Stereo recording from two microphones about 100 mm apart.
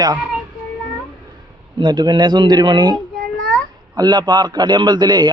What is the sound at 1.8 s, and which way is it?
A man's voice, 50° right (ahead or behind).